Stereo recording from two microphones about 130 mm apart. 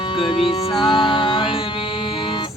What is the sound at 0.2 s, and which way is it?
Music, 40° left (ahead or behind).